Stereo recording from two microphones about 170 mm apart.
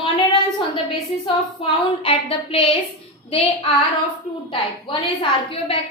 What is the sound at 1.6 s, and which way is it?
A woman's voice, 30° left (ahead or behind).